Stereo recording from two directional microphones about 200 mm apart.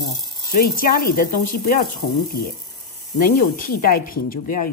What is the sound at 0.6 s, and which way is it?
Speech, 45° left (ahead or behind).